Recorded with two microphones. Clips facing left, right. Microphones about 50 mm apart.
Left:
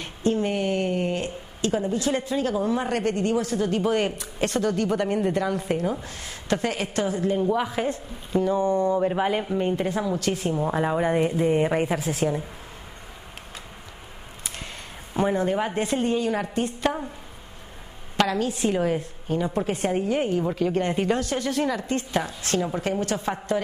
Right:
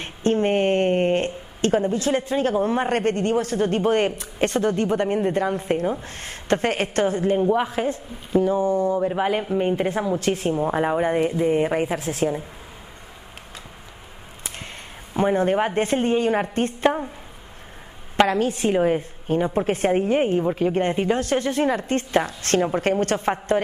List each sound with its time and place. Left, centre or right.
0.0 s a woman's voice: right
7.8 s a woman's voice: centre; by 10.5 s right
10.6 s a woman's voice: centre
12.1 s a woman's voice: right
15.1 s a woman's voice: right
18.1 s a woman's voice: right
19.2 s a woman's voice: right
20.9 s speech: centre
21.2 s a woman's voice: right